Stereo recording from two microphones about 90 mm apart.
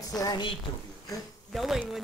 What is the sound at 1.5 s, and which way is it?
Speech, centre (ahead or behind).